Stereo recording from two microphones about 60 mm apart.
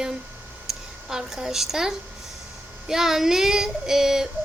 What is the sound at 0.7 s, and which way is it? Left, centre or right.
Speech, centre.